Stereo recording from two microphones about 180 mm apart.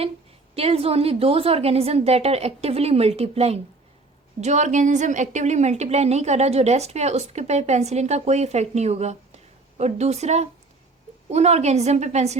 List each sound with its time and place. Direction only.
0.5 s a woman's voice: 35° right (ahead or behind)